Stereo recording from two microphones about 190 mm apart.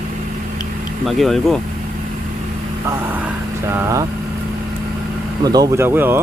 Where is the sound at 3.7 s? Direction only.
15° right (ahead or behind).